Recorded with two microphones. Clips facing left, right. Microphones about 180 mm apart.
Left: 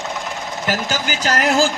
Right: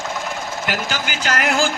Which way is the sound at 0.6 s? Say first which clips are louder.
Left 4 dB; 40° left (ahead or behind).